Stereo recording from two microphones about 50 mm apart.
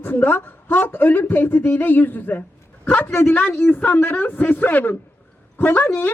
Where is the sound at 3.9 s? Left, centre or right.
Left.